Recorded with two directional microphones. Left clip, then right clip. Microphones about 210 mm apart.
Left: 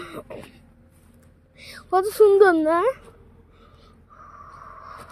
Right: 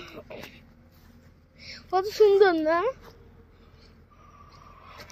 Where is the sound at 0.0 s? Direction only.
35° left (ahead or behind).